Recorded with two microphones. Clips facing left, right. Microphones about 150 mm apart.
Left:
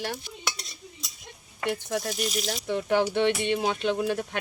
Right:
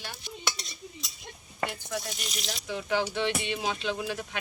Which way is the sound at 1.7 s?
50° left (ahead or behind).